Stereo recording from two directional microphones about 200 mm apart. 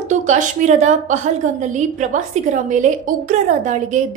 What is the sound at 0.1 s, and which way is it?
A woman's voice, 40° right (ahead or behind).